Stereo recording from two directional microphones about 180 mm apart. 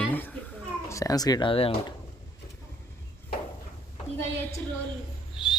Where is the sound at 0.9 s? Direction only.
20° left (ahead or behind).